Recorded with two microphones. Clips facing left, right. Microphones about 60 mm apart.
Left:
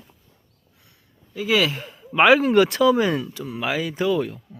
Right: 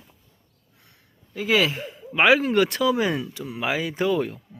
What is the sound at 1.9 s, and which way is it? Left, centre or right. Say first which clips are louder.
Speech: left 3 dB; centre.